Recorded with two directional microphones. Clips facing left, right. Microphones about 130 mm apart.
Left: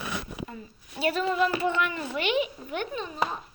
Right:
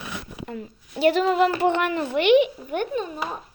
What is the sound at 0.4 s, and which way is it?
A woman's voice, 65° right (ahead or behind).